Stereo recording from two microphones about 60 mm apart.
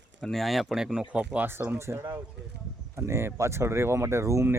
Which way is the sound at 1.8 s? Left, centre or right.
Right.